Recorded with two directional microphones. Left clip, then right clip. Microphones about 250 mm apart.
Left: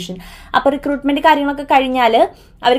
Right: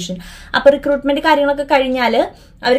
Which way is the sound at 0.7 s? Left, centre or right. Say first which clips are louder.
Right 5 dB; left.